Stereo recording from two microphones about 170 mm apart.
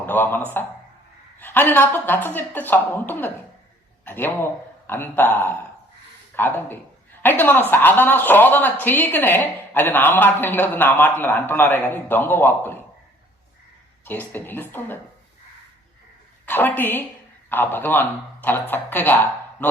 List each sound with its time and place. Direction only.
0.0 s speech: 10° left (ahead or behind)
14.0 s speech: 10° left (ahead or behind)
16.5 s speech: 10° left (ahead or behind)